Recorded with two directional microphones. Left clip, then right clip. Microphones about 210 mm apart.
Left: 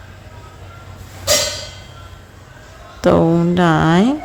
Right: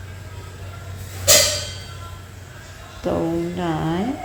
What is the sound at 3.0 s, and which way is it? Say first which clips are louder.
Speech: left 9 dB; 40° left (ahead or behind).